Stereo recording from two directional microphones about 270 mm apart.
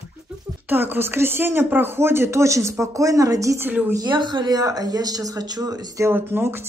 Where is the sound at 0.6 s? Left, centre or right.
Centre.